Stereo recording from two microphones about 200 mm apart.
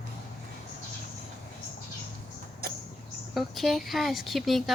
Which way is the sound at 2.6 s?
50° right (ahead or behind).